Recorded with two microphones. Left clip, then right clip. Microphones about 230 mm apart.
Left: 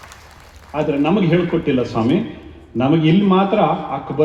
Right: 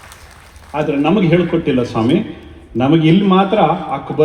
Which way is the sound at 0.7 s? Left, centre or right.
Right.